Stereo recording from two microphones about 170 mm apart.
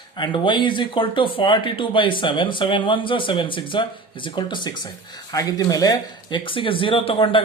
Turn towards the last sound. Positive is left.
turn(degrees=30)  # may be behind; listen again after turning